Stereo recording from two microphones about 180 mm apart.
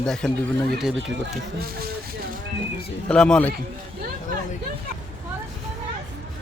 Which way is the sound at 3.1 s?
5° left (ahead or behind).